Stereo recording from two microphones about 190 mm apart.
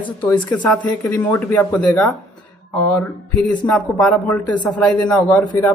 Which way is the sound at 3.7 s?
5° left (ahead or behind).